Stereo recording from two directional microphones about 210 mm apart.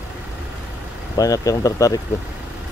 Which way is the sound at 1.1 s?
15° left (ahead or behind).